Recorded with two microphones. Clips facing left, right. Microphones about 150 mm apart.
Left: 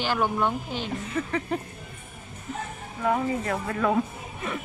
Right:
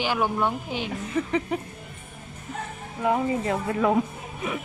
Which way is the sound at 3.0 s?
20° right (ahead or behind).